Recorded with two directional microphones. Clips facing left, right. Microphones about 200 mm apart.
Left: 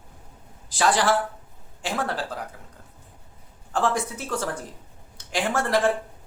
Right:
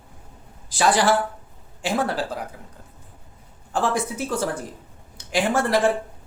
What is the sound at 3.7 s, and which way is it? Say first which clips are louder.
Speech: right 1 dB; 10° right (ahead or behind).